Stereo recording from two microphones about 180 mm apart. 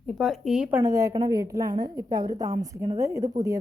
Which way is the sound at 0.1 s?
Centre (ahead or behind).